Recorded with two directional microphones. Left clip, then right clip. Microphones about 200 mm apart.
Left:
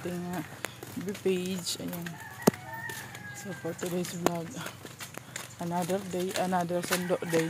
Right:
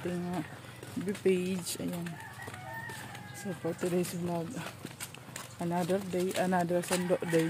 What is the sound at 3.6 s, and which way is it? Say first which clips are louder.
Speech: right 2 dB; 15° right (ahead or behind).